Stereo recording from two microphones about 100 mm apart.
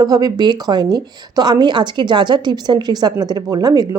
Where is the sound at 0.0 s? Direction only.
40° right (ahead or behind).